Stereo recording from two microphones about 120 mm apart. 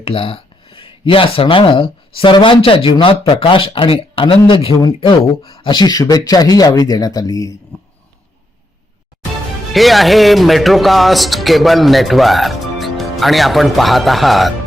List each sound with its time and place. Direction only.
0.0 s speech: 50° left (ahead or behind); by 7.5 s 30° left (ahead or behind)
9.7 s speech: centre (ahead or behind)